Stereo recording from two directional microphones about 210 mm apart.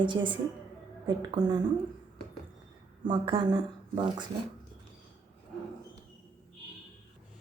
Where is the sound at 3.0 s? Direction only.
20° right (ahead or behind).